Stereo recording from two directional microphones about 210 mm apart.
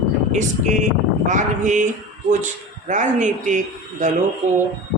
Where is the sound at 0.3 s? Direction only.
35° right (ahead or behind).